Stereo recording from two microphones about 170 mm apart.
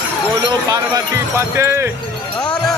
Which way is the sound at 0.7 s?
15° right (ahead or behind).